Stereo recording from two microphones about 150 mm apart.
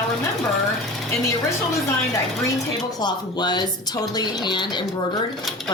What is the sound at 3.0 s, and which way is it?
Speech, 30° left (ahead or behind).